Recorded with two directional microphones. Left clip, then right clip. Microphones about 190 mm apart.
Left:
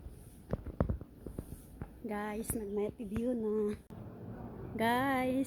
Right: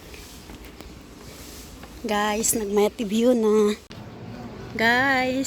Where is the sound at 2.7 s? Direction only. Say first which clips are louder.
Right 16 dB; 15° right (ahead or behind).